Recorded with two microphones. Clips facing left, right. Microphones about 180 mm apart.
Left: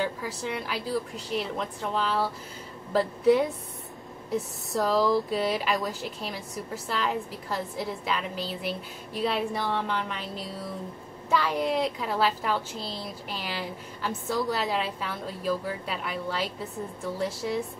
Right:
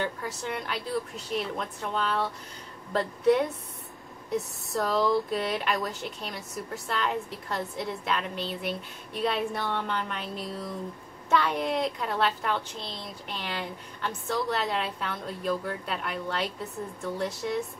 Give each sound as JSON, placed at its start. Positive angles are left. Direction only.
{"t": 0.0, "sound": "speech", "side_deg": 5}